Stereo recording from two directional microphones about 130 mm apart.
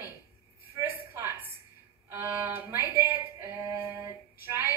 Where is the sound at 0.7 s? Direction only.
15° right (ahead or behind).